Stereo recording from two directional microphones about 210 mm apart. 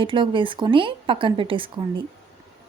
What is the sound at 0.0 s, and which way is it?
Speech, 25° right (ahead or behind).